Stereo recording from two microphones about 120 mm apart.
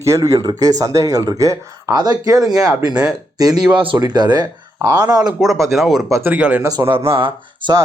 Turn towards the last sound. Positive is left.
turn(degrees=-45)  # may be behind; listen again after turning